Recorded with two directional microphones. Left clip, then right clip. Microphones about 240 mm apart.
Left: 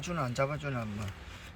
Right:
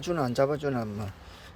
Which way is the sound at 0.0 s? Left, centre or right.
Right.